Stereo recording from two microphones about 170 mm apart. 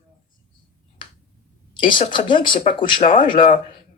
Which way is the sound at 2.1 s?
30° left (ahead or behind).